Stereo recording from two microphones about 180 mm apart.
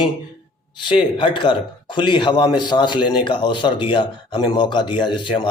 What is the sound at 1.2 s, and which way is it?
A man's voice, 25° left (ahead or behind).